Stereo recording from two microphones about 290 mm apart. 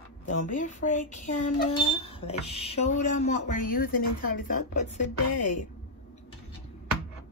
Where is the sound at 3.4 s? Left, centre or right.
Left.